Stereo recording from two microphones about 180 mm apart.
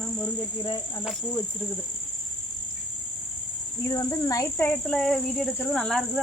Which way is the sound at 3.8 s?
20° left (ahead or behind).